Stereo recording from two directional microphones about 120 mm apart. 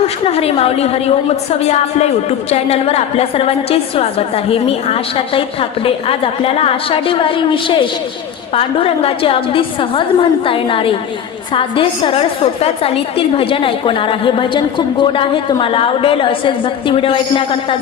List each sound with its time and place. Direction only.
0.3 s a woman's voice: 55° left (ahead or behind)